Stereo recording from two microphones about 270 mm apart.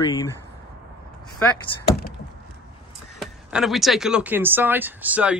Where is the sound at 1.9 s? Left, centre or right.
Left.